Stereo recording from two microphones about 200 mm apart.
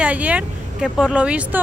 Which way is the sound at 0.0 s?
5° right (ahead or behind).